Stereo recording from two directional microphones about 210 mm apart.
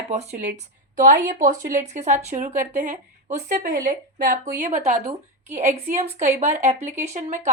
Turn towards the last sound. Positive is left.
turn(degrees=-35)  # may be behind; listen again after turning